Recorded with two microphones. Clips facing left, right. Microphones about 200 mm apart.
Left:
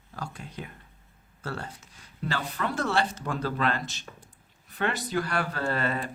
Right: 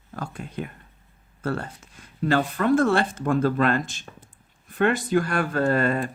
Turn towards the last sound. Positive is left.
turn(degrees=-45)  # may be behind; listen again after turning